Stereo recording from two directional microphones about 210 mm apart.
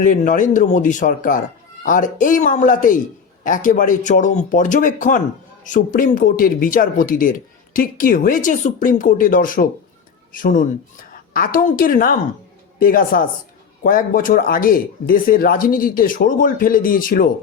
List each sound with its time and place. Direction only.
0.0 s a woman's voice: 40° left (ahead or behind)